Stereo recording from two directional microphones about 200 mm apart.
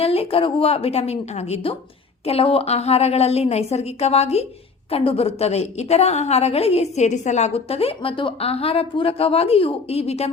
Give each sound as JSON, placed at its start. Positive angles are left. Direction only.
{"t": 0.0, "sound": "a woman's voice", "side_deg": 30}